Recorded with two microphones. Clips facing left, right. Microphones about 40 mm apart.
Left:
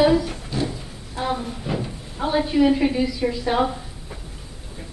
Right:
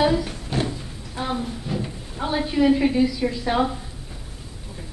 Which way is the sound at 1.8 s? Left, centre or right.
Centre.